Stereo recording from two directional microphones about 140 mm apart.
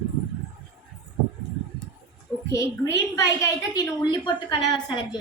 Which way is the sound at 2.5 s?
20° left (ahead or behind).